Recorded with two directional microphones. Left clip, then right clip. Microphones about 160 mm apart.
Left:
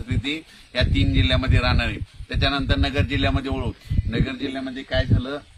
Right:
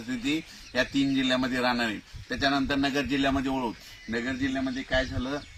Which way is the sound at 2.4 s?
10° left (ahead or behind).